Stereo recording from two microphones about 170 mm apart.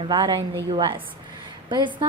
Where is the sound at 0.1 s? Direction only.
25° right (ahead or behind).